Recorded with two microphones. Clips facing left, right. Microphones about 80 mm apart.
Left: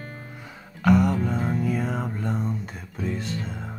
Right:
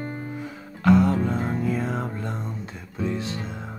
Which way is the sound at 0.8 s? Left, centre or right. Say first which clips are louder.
Right 1 dB; centre.